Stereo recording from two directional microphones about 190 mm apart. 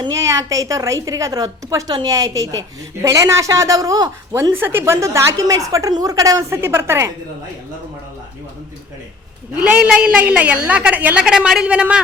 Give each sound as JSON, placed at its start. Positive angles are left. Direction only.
{"t": 0.0, "sound": "a woman's voice", "side_deg": -15}
{"t": 9.6, "sound": "a woman's voice", "side_deg": -5}